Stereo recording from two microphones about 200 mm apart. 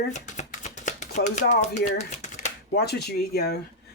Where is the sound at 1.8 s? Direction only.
35° left (ahead or behind).